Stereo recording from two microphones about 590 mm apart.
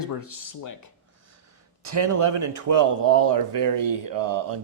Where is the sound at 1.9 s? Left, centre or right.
Right.